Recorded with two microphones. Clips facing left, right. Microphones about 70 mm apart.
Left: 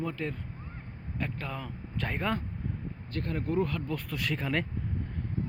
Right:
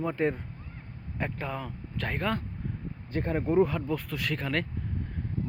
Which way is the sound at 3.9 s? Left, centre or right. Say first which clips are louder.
Right 2 dB; centre.